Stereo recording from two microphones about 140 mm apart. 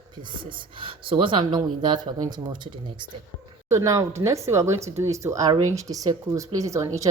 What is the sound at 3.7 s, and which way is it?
Speech, 25° right (ahead or behind).